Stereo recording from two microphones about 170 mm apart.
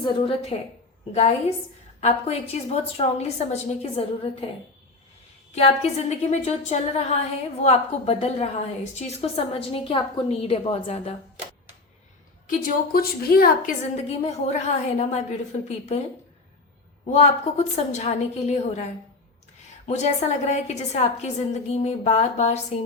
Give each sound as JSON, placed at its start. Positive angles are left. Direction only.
{"t": 0.0, "sound": "a woman's voice", "side_deg": 30}
{"t": 2.0, "sound": "a woman's voice", "side_deg": 40}
{"t": 5.5, "sound": "a woman's voice", "side_deg": 40}
{"t": 12.5, "sound": "a woman's voice", "side_deg": 55}
{"t": 13.9, "sound": "a woman's voice", "side_deg": 40}
{"t": 17.1, "sound": "a woman's voice", "side_deg": 40}
{"t": 19.9, "sound": "a woman's voice", "side_deg": 45}